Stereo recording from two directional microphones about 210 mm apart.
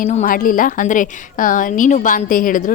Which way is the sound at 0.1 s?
35° left (ahead or behind).